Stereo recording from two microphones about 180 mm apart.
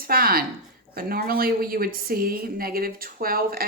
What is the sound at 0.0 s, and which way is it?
A woman's voice, 55° right (ahead or behind).